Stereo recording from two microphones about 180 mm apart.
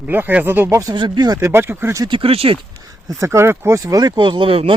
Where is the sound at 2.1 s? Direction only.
30° right (ahead or behind).